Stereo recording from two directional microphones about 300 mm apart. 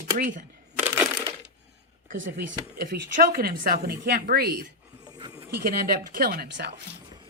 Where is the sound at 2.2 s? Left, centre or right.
Right.